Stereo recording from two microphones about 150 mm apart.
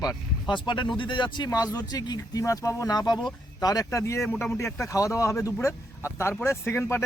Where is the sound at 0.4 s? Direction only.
30° left (ahead or behind).